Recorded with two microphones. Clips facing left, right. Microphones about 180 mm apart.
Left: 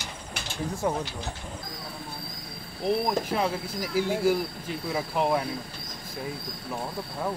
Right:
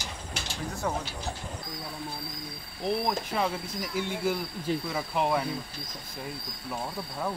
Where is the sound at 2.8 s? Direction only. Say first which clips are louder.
Left 3 dB; 5° left (ahead or behind).